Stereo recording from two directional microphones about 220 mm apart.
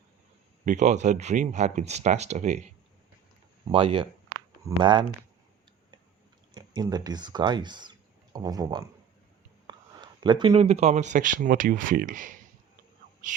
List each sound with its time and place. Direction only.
0.6 s speech: 35° right (ahead or behind)
3.7 s speech: 25° right (ahead or behind)
6.5 s speech: 20° right (ahead or behind); by 12.4 s 35° right (ahead or behind)